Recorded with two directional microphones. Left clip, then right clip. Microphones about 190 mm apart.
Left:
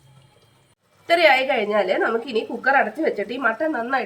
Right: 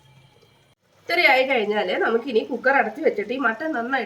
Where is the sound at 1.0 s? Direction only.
15° left (ahead or behind).